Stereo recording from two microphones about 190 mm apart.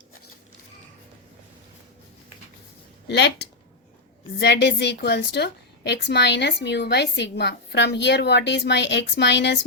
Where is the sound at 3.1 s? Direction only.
65° left (ahead or behind).